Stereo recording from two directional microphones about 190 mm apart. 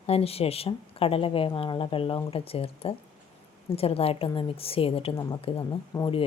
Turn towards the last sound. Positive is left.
turn(degrees=20)  # may be behind; listen again after turning